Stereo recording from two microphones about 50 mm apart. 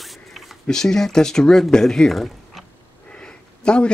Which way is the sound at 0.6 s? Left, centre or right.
Centre.